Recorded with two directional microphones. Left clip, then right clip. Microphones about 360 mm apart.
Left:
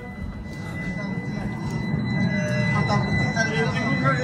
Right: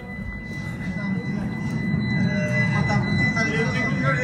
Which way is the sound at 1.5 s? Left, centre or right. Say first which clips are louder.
Right 1 dB; left.